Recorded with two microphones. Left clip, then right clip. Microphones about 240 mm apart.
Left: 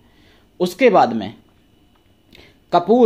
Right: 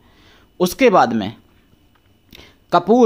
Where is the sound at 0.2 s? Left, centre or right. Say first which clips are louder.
Right 2 dB; right.